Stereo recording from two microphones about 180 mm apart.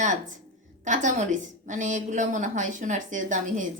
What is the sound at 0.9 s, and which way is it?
A woman's voice, 45° right (ahead or behind).